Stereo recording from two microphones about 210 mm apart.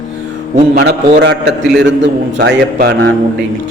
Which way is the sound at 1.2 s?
55° right (ahead or behind).